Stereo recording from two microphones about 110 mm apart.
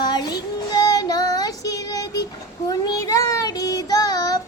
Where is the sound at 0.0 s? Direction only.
40° left (ahead or behind).